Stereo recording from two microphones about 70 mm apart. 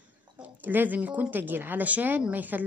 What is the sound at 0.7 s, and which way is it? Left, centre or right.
Speech, right.